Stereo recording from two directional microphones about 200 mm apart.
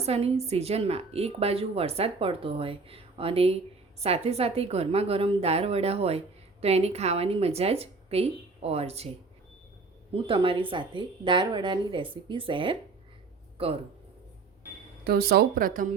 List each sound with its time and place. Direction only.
0.0 s a woman's voice: 30° right (ahead or behind)
10.2 s a woman's voice: 25° right (ahead or behind)
15.0 s speech: 50° right (ahead or behind)